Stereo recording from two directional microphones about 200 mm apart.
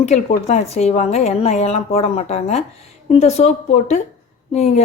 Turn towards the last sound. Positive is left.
turn(degrees=30)  # may be behind; listen again after turning